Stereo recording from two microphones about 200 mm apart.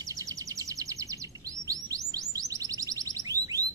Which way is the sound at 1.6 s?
15° right (ahead or behind).